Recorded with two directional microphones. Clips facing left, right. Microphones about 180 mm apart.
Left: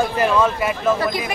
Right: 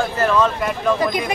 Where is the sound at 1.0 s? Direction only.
20° right (ahead or behind).